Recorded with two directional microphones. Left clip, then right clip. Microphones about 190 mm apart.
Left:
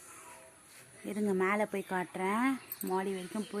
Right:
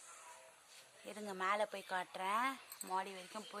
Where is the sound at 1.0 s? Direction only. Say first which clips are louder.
Left 8 dB; 5° right (ahead or behind).